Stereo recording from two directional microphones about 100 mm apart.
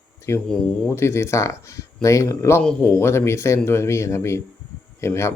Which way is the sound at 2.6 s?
10° left (ahead or behind).